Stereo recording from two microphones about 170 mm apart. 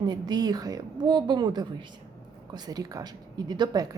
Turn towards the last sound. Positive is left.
turn(degrees=-25)  # may be behind; listen again after turning